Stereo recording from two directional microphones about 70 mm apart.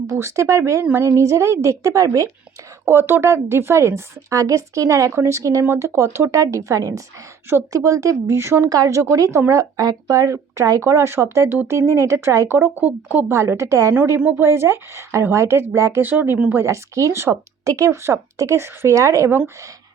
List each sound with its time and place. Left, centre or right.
0.1 s a woman's voice: right
2.8 s a woman's voice: right
5.4 s speech: right
5.6 s a woman's voice: right
12.5 s a woman's voice: right
12.8 s speech: right
13.3 s a woman's voice: right
14.2 s speech: right
14.4 s a woman's voice: right
16.0 s speech: right
16.6 s a woman's voice: right